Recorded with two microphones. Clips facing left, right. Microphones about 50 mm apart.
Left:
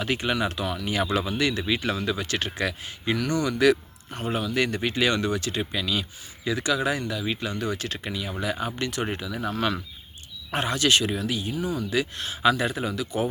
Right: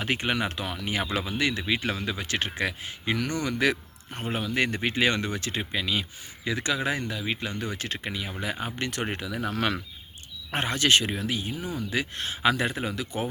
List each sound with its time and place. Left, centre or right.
0.0 s speech: right
8.9 s speech: right
10.5 s speech: right